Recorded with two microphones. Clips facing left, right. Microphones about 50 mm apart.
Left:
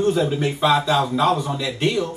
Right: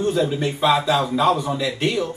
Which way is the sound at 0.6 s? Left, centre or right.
Centre.